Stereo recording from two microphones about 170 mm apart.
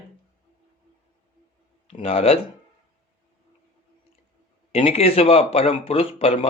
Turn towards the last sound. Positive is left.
turn(degrees=35)  # may be behind; listen again after turning